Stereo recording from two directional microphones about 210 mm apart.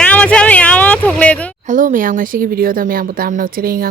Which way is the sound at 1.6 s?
40° right (ahead or behind).